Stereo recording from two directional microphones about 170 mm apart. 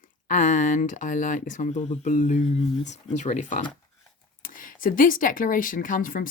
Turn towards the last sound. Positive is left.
turn(degrees=55)  # may be behind; listen again after turning